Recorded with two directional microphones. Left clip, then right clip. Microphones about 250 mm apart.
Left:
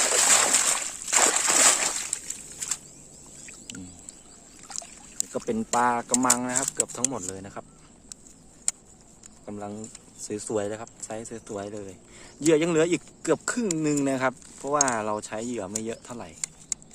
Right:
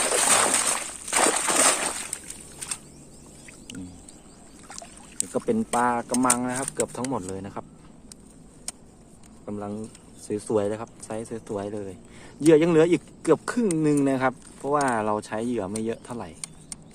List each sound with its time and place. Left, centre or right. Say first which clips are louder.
0.0 s splash: even; centre
5.5 s speech: even; centre
6.9 s speech: right 2 dB; centre
9.5 s speech: right 3 dB; centre